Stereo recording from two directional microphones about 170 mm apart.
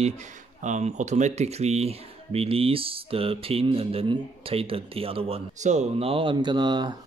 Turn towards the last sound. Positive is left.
turn(degrees=-25)  # may be behind; listen again after turning